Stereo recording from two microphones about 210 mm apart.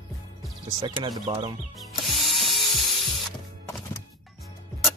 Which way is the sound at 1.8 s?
Centre (ahead or behind).